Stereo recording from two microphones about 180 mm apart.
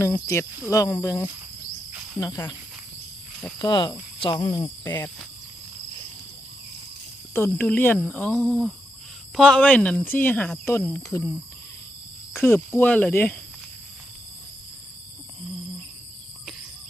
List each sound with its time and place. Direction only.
0.0 s speech: 15° left (ahead or behind)
3.6 s speech: 25° left (ahead or behind)
7.3 s speech: 10° left (ahead or behind)
12.4 s speech: 10° left (ahead or behind)